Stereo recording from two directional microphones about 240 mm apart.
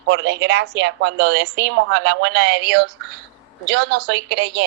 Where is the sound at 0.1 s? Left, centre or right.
Right.